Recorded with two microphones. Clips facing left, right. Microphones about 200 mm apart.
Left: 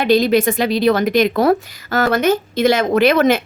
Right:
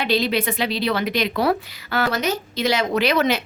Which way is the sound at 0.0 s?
45° left (ahead or behind).